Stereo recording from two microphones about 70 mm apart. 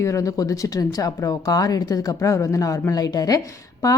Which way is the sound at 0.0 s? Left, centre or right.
Left.